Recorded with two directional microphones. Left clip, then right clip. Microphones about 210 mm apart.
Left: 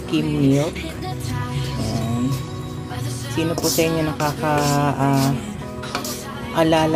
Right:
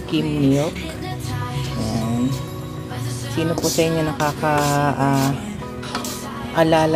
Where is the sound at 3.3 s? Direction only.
Centre (ahead or behind).